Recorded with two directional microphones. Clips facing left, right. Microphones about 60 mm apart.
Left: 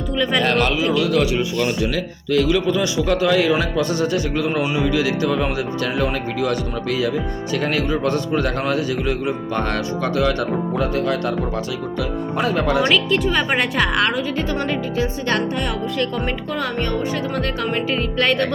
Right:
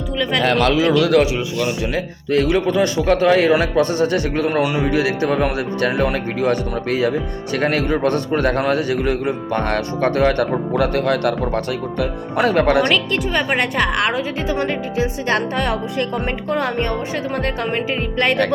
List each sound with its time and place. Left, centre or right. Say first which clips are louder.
0.2 s speech: right 1 dB; centre
0.9 s a man's voice: right 4 dB; right
2.3 s speech: right 1 dB; right
12.9 s speech: left 1 dB; centre
14.6 s music: right 1 dB; centre
15.4 s speech: right 2 dB; right
16.0 s speech: right 1 dB; right
17.9 s music: even; centre